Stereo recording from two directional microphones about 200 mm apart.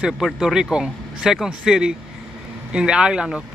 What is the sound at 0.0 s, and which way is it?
Speech, centre (ahead or behind).